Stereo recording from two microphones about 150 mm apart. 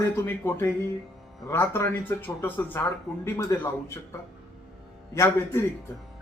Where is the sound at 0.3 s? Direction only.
15° left (ahead or behind).